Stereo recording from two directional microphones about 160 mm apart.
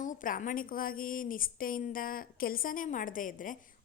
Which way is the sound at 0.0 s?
55° left (ahead or behind).